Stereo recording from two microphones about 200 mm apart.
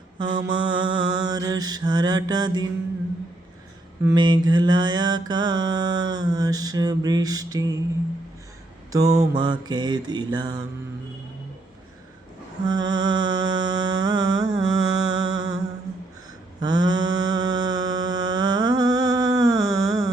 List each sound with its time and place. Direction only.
0.2 s mantra: 20° right (ahead or behind)
4.0 s mantra: 20° right (ahead or behind)
8.9 s mantra: 15° right (ahead or behind)
12.6 s music: 20° right (ahead or behind)
16.6 s mantra: 20° right (ahead or behind)